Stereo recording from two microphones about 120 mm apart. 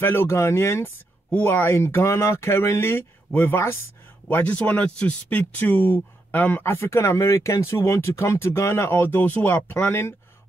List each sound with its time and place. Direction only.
0.0 s speech: 20° left (ahead or behind)